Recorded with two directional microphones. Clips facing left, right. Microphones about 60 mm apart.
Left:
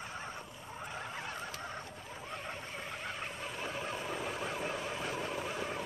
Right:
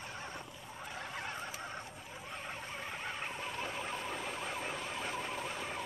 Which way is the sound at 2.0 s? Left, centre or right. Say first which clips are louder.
Left 2 dB; centre.